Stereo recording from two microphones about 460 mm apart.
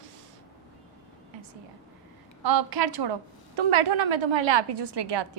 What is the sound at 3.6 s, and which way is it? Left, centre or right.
A woman's voice, right.